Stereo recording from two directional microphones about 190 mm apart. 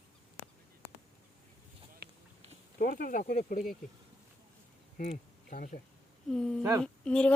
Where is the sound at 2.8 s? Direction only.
50° left (ahead or behind).